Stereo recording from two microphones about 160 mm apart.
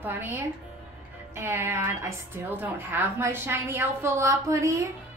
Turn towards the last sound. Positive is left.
turn(degrees=-20)  # may be behind; listen again after turning